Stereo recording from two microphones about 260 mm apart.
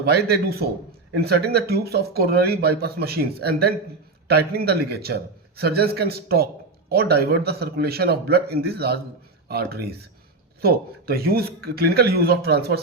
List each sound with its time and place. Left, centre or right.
0.0 s speech: right